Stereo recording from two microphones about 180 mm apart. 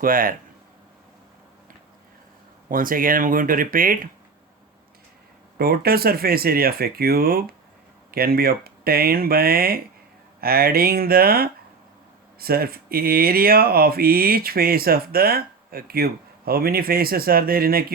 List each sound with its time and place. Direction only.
0.0 s speech: 50° right (ahead or behind)
2.6 s speech: 50° right (ahead or behind)
5.5 s speech: 60° right (ahead or behind)